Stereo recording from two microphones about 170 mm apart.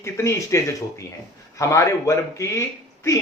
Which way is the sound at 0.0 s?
15° left (ahead or behind).